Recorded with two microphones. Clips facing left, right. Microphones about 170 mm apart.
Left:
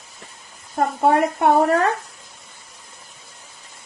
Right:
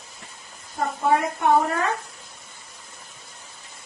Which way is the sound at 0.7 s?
60° left (ahead or behind).